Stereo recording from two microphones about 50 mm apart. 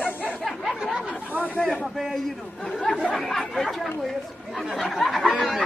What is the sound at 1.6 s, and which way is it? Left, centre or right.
Speech, centre.